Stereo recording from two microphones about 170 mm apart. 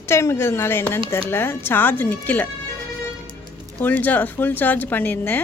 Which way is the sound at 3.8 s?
10° left (ahead or behind).